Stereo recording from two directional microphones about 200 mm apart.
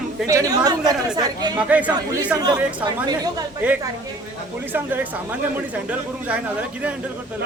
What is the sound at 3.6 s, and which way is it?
Speech, 10° right (ahead or behind).